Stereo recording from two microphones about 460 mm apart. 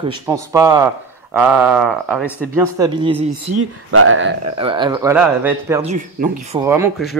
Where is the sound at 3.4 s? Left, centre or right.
Right.